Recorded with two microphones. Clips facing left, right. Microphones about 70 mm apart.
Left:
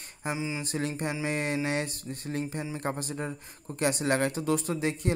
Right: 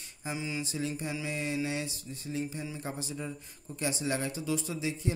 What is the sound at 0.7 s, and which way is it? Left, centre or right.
Speech, left.